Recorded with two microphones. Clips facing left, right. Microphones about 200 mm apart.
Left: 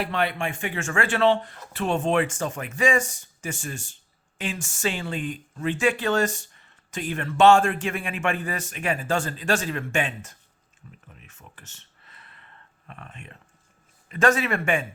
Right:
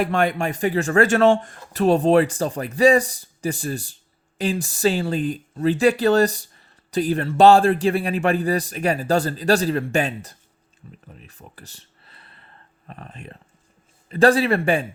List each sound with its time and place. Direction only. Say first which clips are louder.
0.0 s speech: right 6 dB; 45° right (ahead or behind)
11.1 s a sound: right 6 dB; 35° right (ahead or behind)
14.1 s speech: right 6 dB; 35° right (ahead or behind)